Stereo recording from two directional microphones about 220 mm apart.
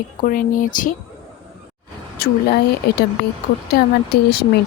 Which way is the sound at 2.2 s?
45° left (ahead or behind).